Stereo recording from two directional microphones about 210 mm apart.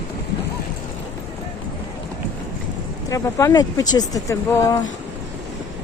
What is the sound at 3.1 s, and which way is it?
Speech, 15° left (ahead or behind).